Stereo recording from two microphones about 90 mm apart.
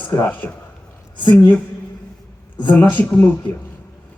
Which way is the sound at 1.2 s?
60° left (ahead or behind).